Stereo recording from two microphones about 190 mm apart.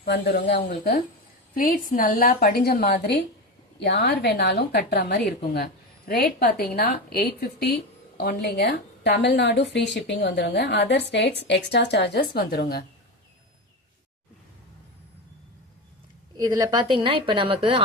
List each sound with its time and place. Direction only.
0.0 s a woman's voice: 60° left (ahead or behind)
16.4 s a woman's voice: 20° right (ahead or behind)